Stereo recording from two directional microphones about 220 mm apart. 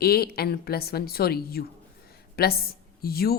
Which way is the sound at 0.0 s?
45° left (ahead or behind).